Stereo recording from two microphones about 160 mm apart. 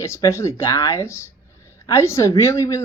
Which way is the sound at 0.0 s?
15° left (ahead or behind).